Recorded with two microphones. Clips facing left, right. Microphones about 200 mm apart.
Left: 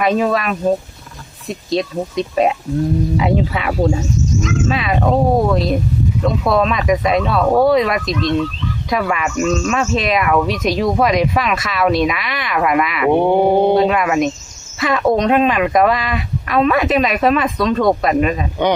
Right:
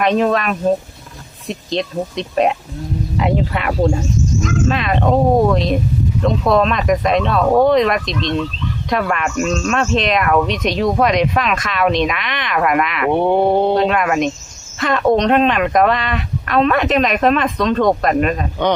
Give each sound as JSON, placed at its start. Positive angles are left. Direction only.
{"t": 0.0, "sound": "speech", "side_deg": 5}
{"t": 1.7, "sound": "speech", "side_deg": 0}